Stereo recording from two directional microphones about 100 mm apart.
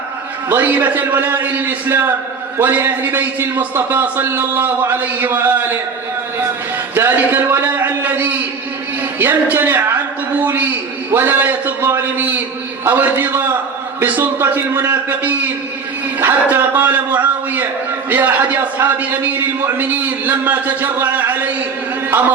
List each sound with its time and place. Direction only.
0.4 s a man's voice: 20° right (ahead or behind)
6.9 s a man's voice: 20° right (ahead or behind)